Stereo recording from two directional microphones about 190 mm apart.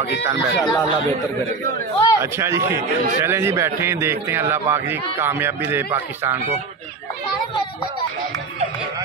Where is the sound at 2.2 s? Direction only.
15° right (ahead or behind).